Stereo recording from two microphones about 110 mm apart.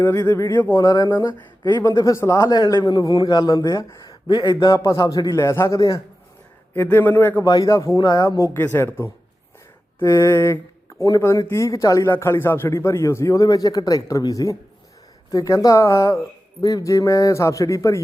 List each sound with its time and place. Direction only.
0.3 s a man's voice: 25° left (ahead or behind); by 4.7 s 45° left (ahead or behind)
4.7 s a man's voice: 25° left (ahead or behind)
6.7 s a man's voice: 20° left (ahead or behind)
7.4 s a man's voice: 35° left (ahead or behind)
8.5 s a man's voice: 20° left (ahead or behind)
10.0 s a sound: 25° left (ahead or behind)
11.2 s a man's voice: 25° left (ahead or behind)